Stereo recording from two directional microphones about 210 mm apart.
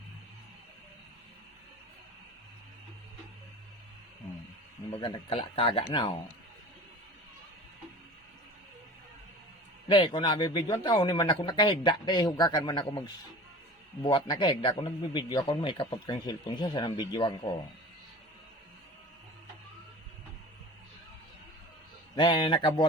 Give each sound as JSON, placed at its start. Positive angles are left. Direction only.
{"t": 4.9, "sound": "speech", "side_deg": 25}
{"t": 9.9, "sound": "speech", "side_deg": 25}
{"t": 14.0, "sound": "speech", "side_deg": 20}
{"t": 22.1, "sound": "speech", "side_deg": 20}